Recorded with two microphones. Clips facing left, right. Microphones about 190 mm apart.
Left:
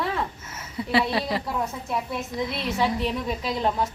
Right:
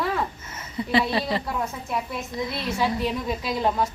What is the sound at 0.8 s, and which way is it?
A woman's voice, 5° left (ahead or behind).